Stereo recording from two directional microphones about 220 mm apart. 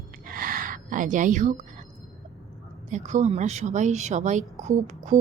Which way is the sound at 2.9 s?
35° right (ahead or behind).